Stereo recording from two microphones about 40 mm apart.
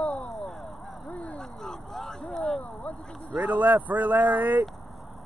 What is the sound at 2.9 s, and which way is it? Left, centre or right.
Vehicle, left.